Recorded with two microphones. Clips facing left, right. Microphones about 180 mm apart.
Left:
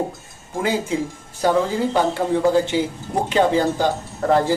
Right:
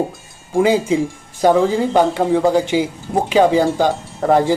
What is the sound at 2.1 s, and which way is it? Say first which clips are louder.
Speech: right 3 dB; 15° right (ahead or behind).